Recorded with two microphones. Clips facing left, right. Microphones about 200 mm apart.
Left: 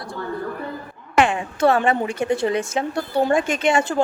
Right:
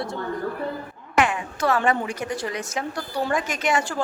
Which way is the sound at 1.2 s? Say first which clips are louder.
Left 5 dB; 30° left (ahead or behind).